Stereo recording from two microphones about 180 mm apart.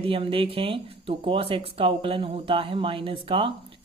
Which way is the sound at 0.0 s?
30° right (ahead or behind).